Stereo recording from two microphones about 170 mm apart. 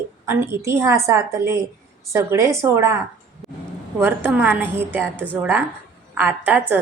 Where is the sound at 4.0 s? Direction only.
15° right (ahead or behind).